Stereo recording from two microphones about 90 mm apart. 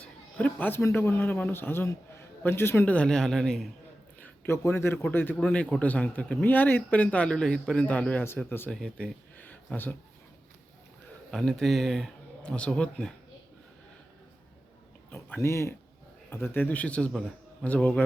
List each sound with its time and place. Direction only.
0.0 s a sound: 15° left (ahead or behind)
0.8 s a man's voice: 30° left (ahead or behind)
2.9 s speech: 10° left (ahead or behind)
4.2 s a sound: 30° left (ahead or behind)
5.4 s a man's voice: 15° left (ahead or behind)
8.7 s speech: 5° left (ahead or behind)
11.3 s speech: 5° left (ahead or behind)
12.5 s speech: 10° left (ahead or behind)
15.1 s a man's voice: 25° left (ahead or behind); by 17.7 s 5° left (ahead or behind)
17.7 s speech: 15° left (ahead or behind)